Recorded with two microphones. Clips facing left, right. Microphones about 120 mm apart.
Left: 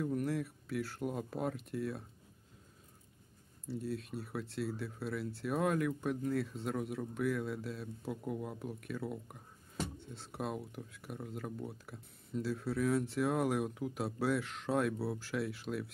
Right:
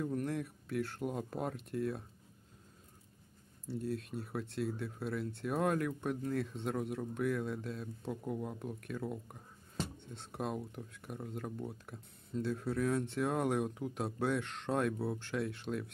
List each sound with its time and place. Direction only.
0.0 s speech: 5° left (ahead or behind)
3.6 s speech: centre (ahead or behind)